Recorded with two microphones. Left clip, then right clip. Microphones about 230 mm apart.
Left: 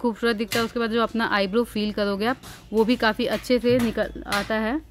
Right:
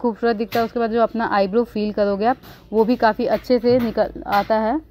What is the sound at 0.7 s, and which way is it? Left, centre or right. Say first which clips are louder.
Speech: right 5 dB; centre.